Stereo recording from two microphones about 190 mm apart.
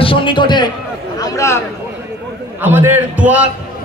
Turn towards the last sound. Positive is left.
turn(degrees=-10)  # may be behind; listen again after turning